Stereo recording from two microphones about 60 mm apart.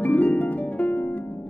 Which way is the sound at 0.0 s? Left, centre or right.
Left.